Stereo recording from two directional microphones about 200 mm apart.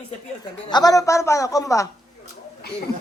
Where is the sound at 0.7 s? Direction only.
20° left (ahead or behind).